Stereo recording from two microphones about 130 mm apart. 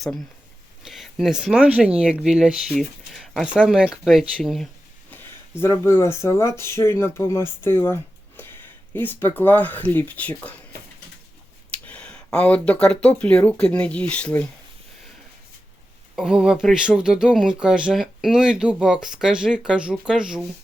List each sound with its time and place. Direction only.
0.8 s speech: centre (ahead or behind)
5.1 s speech: 15° left (ahead or behind)
11.7 s speech: 10° left (ahead or behind)
16.1 s speech: 5° right (ahead or behind)